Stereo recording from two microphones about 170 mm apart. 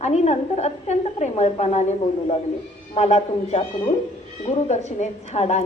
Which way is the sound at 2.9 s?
35° left (ahead or behind).